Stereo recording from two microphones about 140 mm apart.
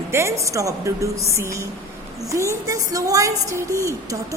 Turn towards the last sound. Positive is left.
turn(degrees=-25)  # may be behind; listen again after turning